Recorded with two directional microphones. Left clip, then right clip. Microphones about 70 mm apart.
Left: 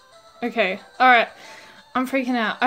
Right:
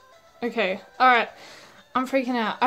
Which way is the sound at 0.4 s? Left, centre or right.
Centre.